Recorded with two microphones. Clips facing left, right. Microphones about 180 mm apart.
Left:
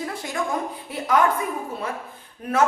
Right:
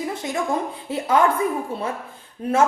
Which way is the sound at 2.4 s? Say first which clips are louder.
Right 5 dB; 30° right (ahead or behind).